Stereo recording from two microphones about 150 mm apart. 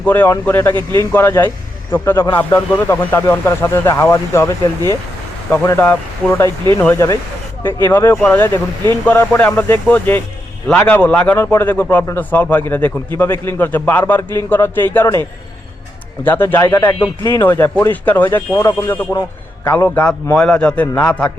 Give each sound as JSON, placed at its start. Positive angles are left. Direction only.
{"t": 0.0, "sound": "a man's voice", "side_deg": 15}
{"t": 5.6, "sound": "a man's voice", "side_deg": 15}